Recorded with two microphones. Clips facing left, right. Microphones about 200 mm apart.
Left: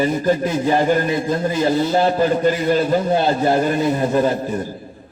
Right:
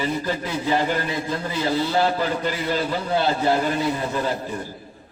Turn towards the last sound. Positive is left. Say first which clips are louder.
# left 8 dB
turn(degrees=45)  # may be behind; listen again after turning